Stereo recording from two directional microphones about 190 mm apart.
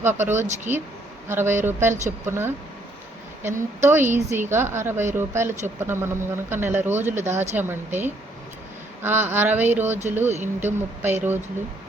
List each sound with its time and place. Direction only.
0.0 s speech: 10° right (ahead or behind)
3.8 s speech: 10° right (ahead or behind)
9.0 s speech: 10° right (ahead or behind)